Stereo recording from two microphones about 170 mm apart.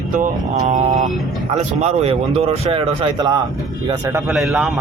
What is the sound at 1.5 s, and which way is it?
Speech, 40° right (ahead or behind).